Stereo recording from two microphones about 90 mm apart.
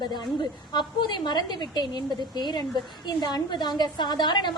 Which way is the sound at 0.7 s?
55° left (ahead or behind).